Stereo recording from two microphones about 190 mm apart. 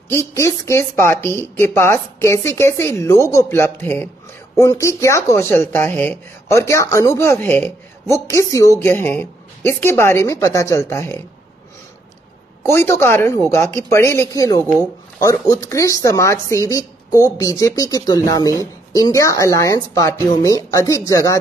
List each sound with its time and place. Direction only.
0.1 s speech: 15° left (ahead or behind)
12.7 s speech: 15° left (ahead or behind)